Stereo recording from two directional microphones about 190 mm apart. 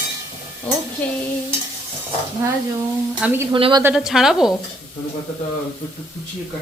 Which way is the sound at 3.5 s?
25° right (ahead or behind).